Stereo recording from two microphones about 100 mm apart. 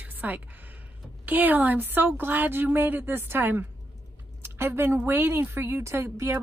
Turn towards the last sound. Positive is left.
turn(degrees=-25)  # may be behind; listen again after turning